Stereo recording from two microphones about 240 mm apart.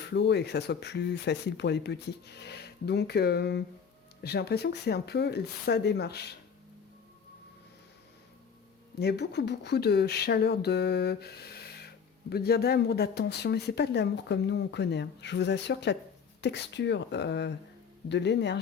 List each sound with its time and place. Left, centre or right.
0.1 s speech: left
9.0 s speech: left